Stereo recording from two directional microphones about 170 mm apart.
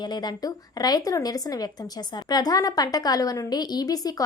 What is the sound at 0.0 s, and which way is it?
A woman's voice, 25° left (ahead or behind).